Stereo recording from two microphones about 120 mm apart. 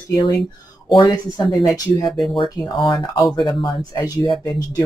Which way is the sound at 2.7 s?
40° left (ahead or behind).